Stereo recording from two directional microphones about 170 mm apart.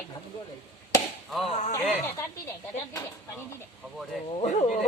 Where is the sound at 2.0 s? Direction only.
15° left (ahead or behind).